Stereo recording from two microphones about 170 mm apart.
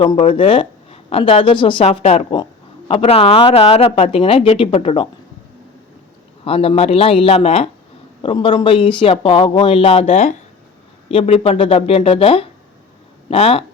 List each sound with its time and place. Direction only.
0.0 s speech: 30° left (ahead or behind)
2.3 s speech: 25° left (ahead or behind)
6.4 s speech: 35° left (ahead or behind)